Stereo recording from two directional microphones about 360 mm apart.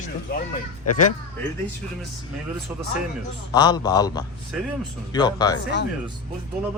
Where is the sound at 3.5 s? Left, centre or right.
Centre.